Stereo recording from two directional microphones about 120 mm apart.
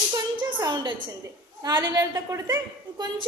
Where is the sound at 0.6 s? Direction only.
35° right (ahead or behind).